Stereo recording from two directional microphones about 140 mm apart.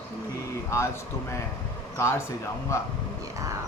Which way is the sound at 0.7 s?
20° left (ahead or behind).